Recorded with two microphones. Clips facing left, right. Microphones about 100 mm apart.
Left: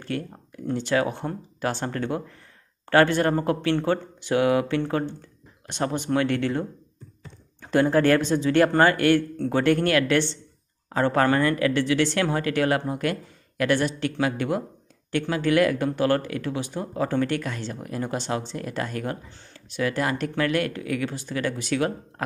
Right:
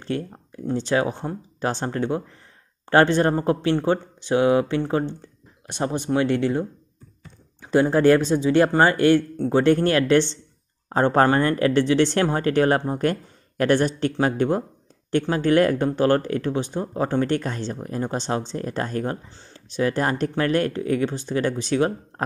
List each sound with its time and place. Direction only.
0.0 s speech: 25° right (ahead or behind)
7.6 s speech: 20° right (ahead or behind)